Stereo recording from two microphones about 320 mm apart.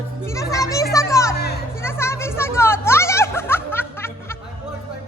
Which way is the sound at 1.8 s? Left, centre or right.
Centre.